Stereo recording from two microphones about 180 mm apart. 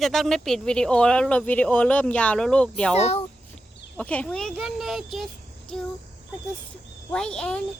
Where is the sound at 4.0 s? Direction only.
10° left (ahead or behind).